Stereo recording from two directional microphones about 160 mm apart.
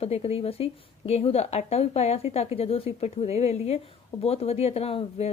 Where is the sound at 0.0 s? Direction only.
40° left (ahead or behind).